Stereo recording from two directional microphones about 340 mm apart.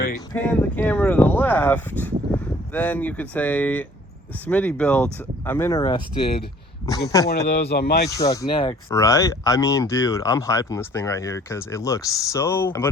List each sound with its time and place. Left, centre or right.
0.3 s speech: centre
7.0 s speech: centre
7.3 s speech: left
8.2 s speech: centre